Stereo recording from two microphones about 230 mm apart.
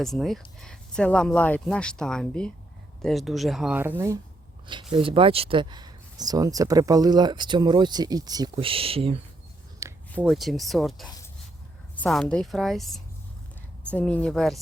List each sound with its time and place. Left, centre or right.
0.0 s speech: centre; by 9.1 s right
9.8 s speech: centre